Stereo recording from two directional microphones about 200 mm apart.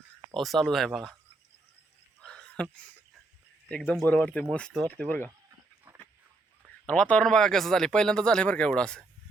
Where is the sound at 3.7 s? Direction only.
5° left (ahead or behind).